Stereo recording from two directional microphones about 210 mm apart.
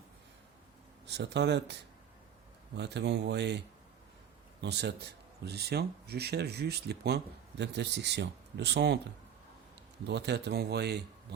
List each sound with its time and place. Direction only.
1.0 s speech: 55° right (ahead or behind)
2.7 s speech: 55° right (ahead or behind)
4.6 s speech: 55° right (ahead or behind)
10.1 s speech: 55° right (ahead or behind)